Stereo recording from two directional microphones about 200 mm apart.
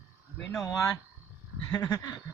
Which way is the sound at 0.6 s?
15° left (ahead or behind).